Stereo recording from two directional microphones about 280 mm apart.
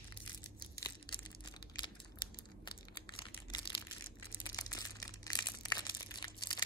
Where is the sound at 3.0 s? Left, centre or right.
Centre.